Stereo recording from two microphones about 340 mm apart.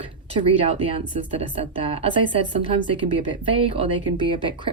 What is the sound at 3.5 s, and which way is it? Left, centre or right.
Speech, centre.